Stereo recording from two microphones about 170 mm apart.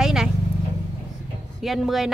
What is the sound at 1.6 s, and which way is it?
Speech, centre (ahead or behind).